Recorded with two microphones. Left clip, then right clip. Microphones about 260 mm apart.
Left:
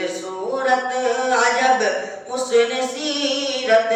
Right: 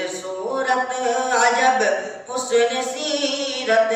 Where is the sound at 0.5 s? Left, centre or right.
Centre.